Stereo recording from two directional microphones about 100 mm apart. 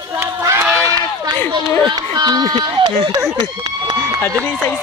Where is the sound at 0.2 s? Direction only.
25° right (ahead or behind).